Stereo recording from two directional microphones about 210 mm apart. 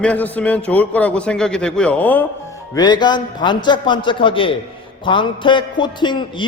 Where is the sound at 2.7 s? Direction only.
20° left (ahead or behind).